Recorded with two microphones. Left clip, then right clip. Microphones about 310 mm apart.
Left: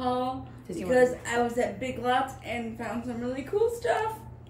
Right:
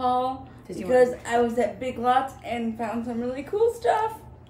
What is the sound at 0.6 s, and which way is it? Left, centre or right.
Speech, centre.